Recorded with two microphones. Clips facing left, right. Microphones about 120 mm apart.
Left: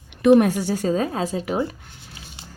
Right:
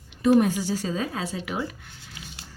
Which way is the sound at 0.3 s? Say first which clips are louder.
Left 3 dB; 65° left (ahead or behind).